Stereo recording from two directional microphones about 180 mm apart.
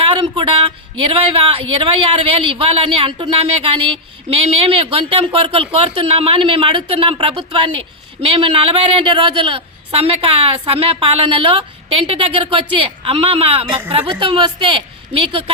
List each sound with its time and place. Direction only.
0.0 s a woman's voice: 30° right (ahead or behind)